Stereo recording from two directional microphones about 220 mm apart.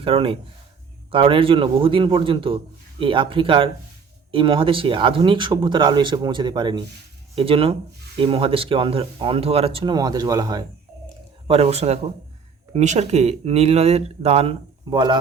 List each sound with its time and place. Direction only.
0.0 s speech: 25° right (ahead or behind)
11.4 s speech: 25° right (ahead or behind)